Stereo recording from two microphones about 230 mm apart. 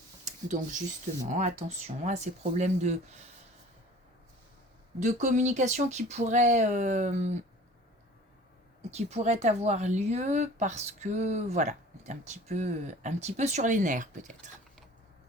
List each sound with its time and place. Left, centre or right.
0.3 s a woman's voice: right
4.9 s a woman's voice: right
8.9 s a woman's voice: right